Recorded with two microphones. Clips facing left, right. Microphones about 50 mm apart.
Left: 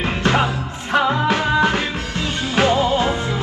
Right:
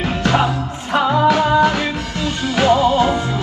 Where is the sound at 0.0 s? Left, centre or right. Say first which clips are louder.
Right 1 dB; left.